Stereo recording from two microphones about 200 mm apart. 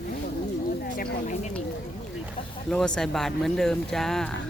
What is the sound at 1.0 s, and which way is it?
Speech, 45° left (ahead or behind).